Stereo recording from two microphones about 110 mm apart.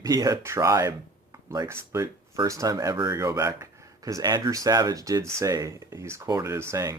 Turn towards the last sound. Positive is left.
turn(degrees=-25)  # may be behind; listen again after turning